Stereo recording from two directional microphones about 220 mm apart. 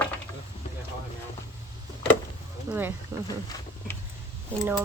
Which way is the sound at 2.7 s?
10° right (ahead or behind).